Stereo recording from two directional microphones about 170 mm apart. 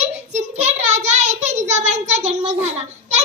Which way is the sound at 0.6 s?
40° right (ahead or behind).